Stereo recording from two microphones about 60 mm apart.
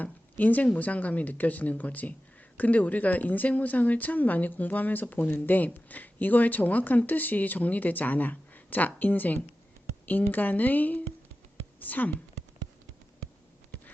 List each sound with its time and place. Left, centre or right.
0.0 s speech: left